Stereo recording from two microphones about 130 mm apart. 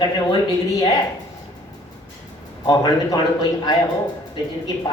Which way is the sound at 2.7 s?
30° left (ahead or behind).